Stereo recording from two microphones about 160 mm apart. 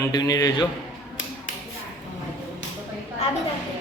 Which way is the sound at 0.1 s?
25° left (ahead or behind).